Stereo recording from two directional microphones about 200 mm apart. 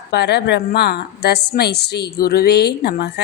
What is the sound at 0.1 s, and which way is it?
A woman's voice, 55° left (ahead or behind).